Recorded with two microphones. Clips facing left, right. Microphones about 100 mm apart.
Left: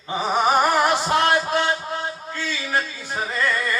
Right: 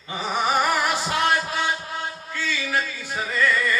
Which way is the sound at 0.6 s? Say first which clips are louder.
Left 4 dB; 20° left (ahead or behind).